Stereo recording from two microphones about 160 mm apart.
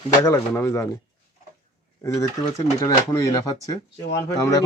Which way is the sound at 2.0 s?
20° left (ahead or behind).